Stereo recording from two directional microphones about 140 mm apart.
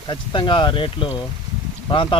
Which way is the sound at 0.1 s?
35° left (ahead or behind).